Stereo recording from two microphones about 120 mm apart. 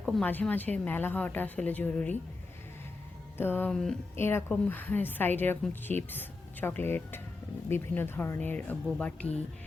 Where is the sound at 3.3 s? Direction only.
15° left (ahead or behind).